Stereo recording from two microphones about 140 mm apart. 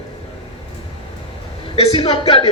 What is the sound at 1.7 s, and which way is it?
Speech, 40° left (ahead or behind).